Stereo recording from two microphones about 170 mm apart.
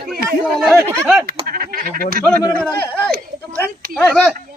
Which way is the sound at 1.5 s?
55° right (ahead or behind).